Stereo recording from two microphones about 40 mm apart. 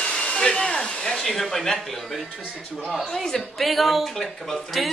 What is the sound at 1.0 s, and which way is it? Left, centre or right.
Speech, centre.